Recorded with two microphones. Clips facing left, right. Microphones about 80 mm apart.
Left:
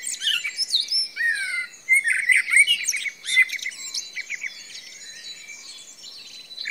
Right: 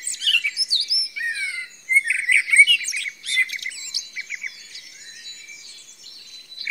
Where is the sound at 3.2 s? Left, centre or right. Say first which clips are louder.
Left 3 dB; left.